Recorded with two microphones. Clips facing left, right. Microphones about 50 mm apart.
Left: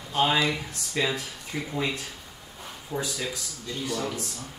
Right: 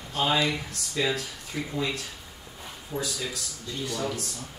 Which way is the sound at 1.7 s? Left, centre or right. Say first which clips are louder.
Left 1 dB; left.